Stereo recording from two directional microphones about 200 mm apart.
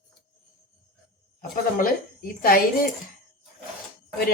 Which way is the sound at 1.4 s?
45° left (ahead or behind).